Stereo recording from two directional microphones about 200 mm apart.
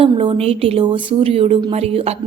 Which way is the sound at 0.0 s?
30° right (ahead or behind).